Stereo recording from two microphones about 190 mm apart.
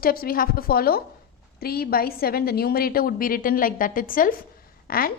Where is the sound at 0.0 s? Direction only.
50° left (ahead or behind).